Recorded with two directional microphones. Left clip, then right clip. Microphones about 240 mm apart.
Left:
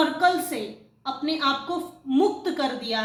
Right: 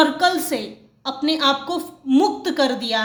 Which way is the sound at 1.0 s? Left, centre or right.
Right.